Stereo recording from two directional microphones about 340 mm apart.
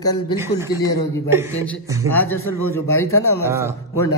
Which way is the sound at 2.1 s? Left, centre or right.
Centre.